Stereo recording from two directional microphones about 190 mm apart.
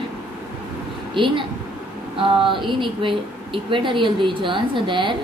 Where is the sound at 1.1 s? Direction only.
25° right (ahead or behind).